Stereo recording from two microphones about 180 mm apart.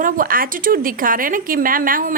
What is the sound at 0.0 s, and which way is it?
Speech, 50° right (ahead or behind).